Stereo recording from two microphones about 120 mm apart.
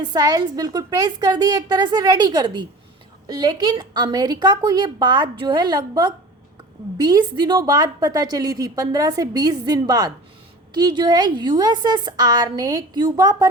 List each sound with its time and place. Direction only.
0.0 s a woman's voice: 35° right (ahead or behind)